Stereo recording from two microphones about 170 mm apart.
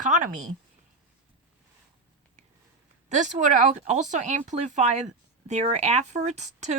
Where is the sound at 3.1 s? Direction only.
45° right (ahead or behind).